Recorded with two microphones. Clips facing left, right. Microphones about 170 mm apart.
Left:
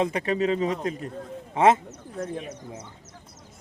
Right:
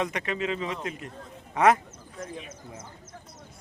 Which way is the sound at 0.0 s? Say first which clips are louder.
Left 5 dB; 30° left (ahead or behind).